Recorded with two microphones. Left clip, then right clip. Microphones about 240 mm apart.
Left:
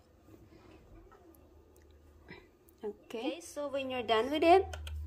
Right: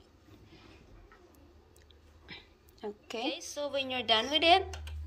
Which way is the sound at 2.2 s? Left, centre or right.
Centre.